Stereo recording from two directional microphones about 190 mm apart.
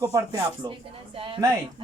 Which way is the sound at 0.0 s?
15° right (ahead or behind).